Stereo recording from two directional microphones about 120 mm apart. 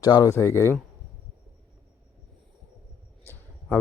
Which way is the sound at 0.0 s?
30° left (ahead or behind).